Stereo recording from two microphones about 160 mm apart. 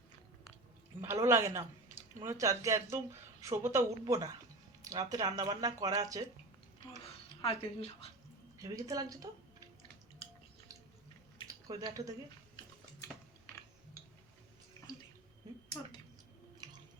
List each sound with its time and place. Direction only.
1.0 s speech: 15° right (ahead or behind)
7.4 s speech: 40° left (ahead or behind)
8.5 s speech: 20° right (ahead or behind)
11.7 s speech: 25° right (ahead or behind)
16.6 s squish: 25° right (ahead or behind)